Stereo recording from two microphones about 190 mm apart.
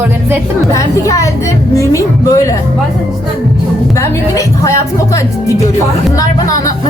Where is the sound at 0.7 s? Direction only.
15° left (ahead or behind).